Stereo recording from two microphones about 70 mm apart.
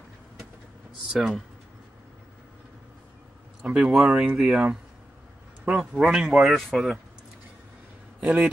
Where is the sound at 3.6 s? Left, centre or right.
Centre.